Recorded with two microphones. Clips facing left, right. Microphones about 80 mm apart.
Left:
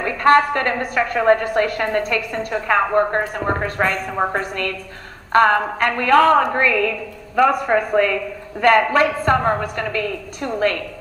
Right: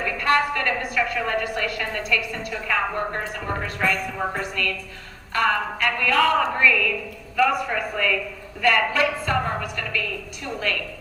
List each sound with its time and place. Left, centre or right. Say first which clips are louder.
0.0 s a woman's voice: left 7 dB; left